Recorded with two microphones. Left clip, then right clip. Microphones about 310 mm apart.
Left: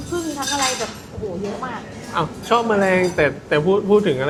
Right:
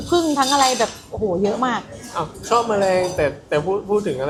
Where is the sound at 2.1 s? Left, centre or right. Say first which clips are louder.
Left 1 dB; left.